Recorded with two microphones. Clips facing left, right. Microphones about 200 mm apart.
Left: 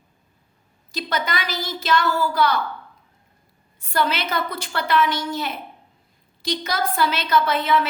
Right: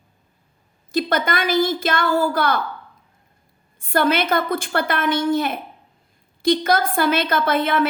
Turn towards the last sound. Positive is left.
turn(degrees=-55)  # may be behind; listen again after turning